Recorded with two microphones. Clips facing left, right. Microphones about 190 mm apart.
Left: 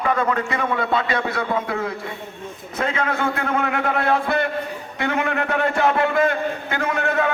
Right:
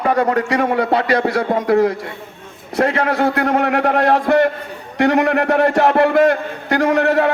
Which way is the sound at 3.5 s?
70° right (ahead or behind).